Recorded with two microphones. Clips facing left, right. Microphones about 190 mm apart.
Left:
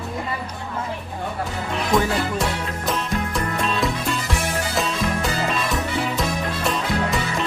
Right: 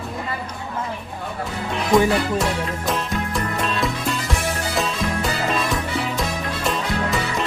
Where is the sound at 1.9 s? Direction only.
Centre (ahead or behind).